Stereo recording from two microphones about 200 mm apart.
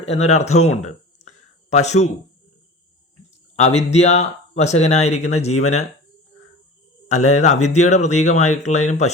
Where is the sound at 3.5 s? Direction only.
35° left (ahead or behind).